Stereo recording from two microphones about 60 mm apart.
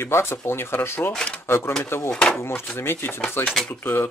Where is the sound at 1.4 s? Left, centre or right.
Left.